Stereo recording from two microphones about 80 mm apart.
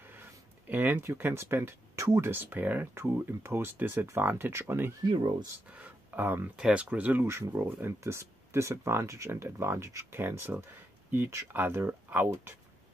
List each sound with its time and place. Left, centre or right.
0.0 s a sound: right
1.0 s speech: right
5.0 s speech: right
5.7 s speech: right
6.5 s speech: centre
7.2 s speech: right
10.1 s speech: right